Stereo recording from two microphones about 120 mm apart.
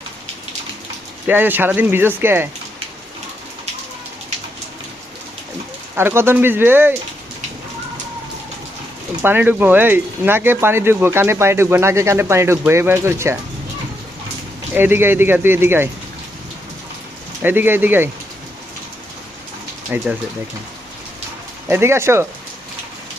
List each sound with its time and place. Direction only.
1.3 s speech: 15° right (ahead or behind)
6.0 s speech: 20° right (ahead or behind)
9.2 s speech: 15° right (ahead or behind)
14.8 s speech: 20° right (ahead or behind)
17.4 s speech: 15° right (ahead or behind)
19.9 s speech: 15° right (ahead or behind)
21.7 s speech: 20° right (ahead or behind)